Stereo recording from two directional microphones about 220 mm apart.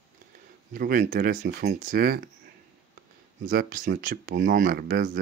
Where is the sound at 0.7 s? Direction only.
40° right (ahead or behind).